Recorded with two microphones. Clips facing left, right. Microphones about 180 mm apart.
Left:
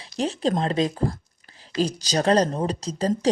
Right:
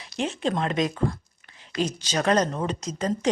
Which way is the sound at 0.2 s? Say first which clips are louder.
Left 3 dB; 35° left (ahead or behind).